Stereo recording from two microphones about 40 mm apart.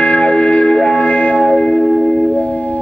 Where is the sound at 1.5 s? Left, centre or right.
Left.